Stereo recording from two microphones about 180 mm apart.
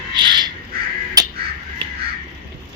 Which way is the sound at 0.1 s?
25° right (ahead or behind).